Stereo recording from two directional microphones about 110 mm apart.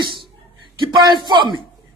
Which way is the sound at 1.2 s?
45° right (ahead or behind).